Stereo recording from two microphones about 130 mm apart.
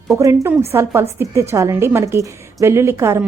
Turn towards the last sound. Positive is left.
turn(degrees=-20)  # may be behind; listen again after turning